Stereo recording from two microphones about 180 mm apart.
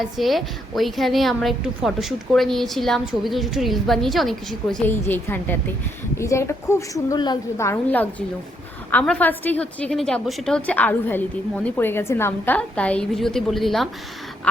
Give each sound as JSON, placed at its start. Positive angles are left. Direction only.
{"t": 0.0, "sound": "a woman's voice", "side_deg": 0}
{"t": 4.9, "sound": "a woman's voice", "side_deg": 10}